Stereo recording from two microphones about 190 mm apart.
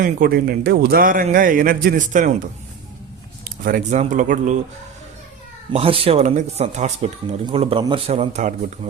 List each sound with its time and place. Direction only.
0.0 s a man's voice: 50° right (ahead or behind)
5.7 s a man's voice: 30° right (ahead or behind)